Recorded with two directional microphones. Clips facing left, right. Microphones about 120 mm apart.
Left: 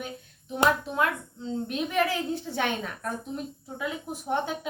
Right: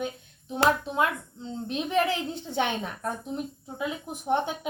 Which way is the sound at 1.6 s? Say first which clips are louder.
Right 2 dB; 25° right (ahead or behind).